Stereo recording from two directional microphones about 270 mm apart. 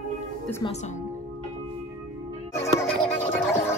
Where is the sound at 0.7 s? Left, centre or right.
Left.